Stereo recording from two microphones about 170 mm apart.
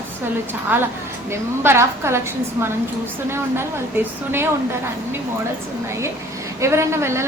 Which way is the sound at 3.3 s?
15° right (ahead or behind).